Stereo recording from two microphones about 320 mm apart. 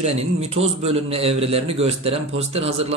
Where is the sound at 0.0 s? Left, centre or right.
Centre.